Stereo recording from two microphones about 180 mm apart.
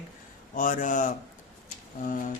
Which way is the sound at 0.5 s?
45° left (ahead or behind).